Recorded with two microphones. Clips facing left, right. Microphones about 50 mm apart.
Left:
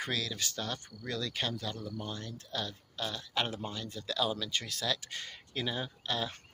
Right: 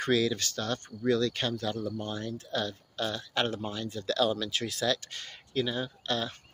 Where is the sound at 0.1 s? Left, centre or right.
Centre.